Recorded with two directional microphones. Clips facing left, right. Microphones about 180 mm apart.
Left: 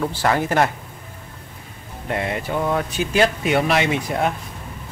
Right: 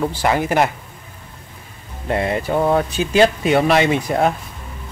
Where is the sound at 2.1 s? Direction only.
35° right (ahead or behind).